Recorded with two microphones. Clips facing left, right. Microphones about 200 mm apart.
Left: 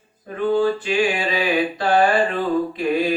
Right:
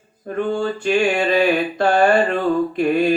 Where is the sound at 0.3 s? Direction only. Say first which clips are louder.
Left 2 dB; 50° right (ahead or behind).